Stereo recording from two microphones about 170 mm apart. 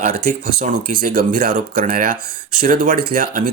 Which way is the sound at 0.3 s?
55° right (ahead or behind).